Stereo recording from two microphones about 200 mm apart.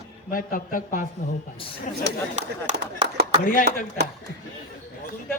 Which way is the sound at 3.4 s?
45° left (ahead or behind).